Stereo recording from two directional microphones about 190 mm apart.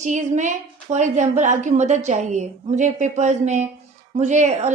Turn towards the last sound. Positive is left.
turn(degrees=-35)  # may be behind; listen again after turning